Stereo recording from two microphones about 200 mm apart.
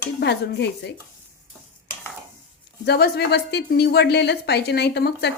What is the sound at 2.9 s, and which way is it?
A woman's voice, 50° left (ahead or behind).